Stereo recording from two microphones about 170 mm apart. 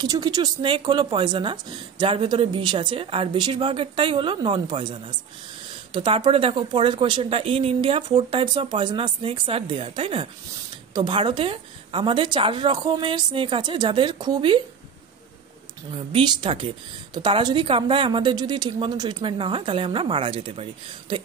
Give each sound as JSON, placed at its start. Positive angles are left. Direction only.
{"t": 0.0, "sound": "speech", "side_deg": -25}
{"t": 15.9, "sound": "speech", "side_deg": -35}